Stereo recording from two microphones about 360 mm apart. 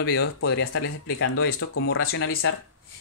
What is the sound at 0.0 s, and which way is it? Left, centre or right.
Speech, left.